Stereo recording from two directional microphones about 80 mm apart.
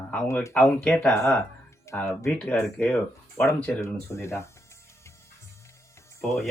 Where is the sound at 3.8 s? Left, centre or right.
Left.